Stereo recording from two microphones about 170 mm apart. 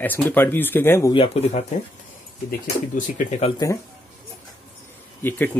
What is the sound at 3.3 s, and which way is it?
Speech, 40° left (ahead or behind).